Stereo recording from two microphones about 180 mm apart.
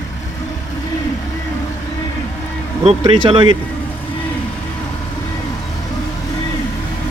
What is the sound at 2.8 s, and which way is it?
Speech, 35° right (ahead or behind).